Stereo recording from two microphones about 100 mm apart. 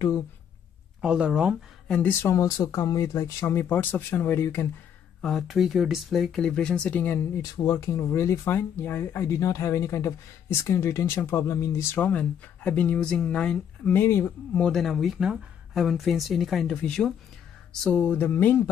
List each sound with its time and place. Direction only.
1.0 s speech: 10° right (ahead or behind)
1.9 s speech: 15° left (ahead or behind)
2.3 s speech: 35° left (ahead or behind)
5.2 s speech: centre (ahead or behind); by 7.2 s 15° left (ahead or behind)
7.5 s speech: 35° left (ahead or behind)
12.0 s speech: 15° left (ahead or behind)
13.9 s speech: 25° left (ahead or behind)
14.5 s speech: 10° left (ahead or behind)